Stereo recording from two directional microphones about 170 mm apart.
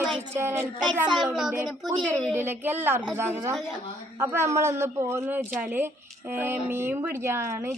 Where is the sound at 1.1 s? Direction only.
Centre (ahead or behind).